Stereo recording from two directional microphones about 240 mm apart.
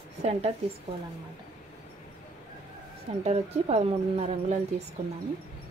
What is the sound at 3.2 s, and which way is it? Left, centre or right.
Speech, right.